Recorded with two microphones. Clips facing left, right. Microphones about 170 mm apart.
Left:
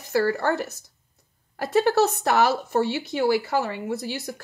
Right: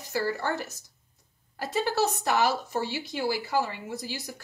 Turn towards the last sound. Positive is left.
turn(degrees=60)  # may be behind; listen again after turning